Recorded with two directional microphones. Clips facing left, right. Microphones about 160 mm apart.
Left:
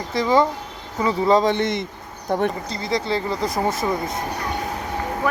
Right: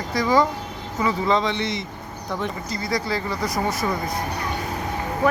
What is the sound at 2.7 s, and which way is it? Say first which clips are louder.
Speech: left 2 dB; 25° left (ahead or behind).